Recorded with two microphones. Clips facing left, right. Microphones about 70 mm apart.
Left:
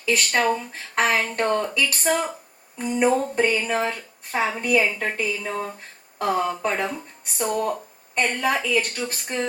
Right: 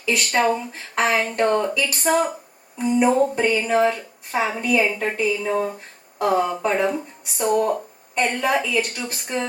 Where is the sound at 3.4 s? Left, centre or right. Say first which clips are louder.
Right 4 dB; right.